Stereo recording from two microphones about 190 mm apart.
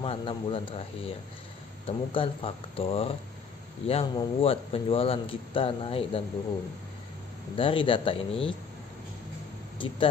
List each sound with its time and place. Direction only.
0.0 s speech: 30° left (ahead or behind)
7.5 s speech: 30° left (ahead or behind)
9.8 s speech: 25° left (ahead or behind)